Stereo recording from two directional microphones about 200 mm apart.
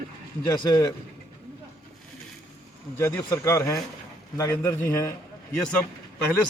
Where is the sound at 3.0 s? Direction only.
15° left (ahead or behind).